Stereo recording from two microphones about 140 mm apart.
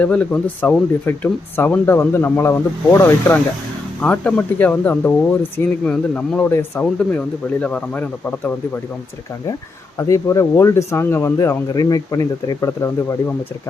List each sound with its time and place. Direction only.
0.0 s speech: 10° left (ahead or behind)
10.0 s speech: 20° left (ahead or behind)